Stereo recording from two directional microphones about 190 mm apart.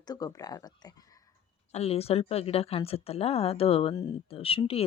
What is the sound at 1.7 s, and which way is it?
Speech, 30° left (ahead or behind).